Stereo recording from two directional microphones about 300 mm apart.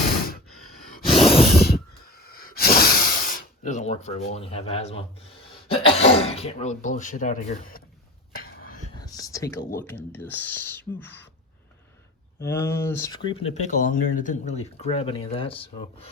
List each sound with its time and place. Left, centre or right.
1.2 s snort: centre
1.5 s a sound: left
5.6 s speech: centre
8.3 s whispering: left
8.9 s a sound: centre
9.8 s speech: centre
12.4 s speech: centre